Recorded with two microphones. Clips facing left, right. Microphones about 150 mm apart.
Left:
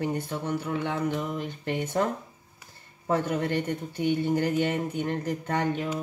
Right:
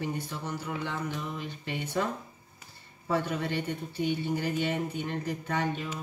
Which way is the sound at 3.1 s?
50° left (ahead or behind).